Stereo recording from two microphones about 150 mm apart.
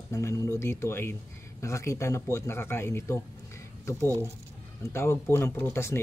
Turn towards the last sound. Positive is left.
turn(degrees=15)  # may be behind; listen again after turning